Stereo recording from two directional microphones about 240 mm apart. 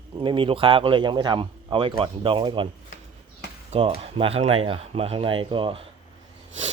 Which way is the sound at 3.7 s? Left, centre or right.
Right.